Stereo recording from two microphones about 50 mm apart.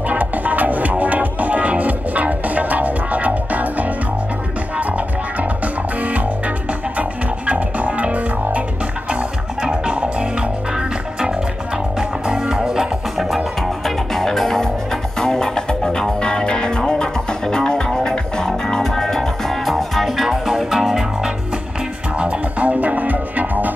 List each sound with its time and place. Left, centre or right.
0.1 s music: right
7.0 s music: right
9.6 s music: centre
12.0 s music: centre
13.6 s music: centre
22.1 s music: right